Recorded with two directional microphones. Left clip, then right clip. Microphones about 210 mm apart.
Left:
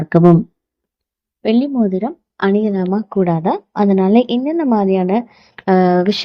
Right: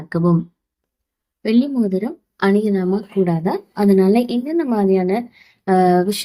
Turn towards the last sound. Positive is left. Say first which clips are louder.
# left 2 dB
turn(degrees=35)  # may be behind; listen again after turning